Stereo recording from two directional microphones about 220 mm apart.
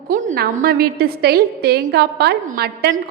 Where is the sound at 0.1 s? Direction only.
35° right (ahead or behind).